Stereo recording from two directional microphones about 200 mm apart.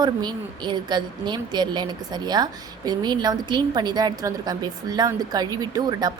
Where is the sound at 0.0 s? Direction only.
20° right (ahead or behind).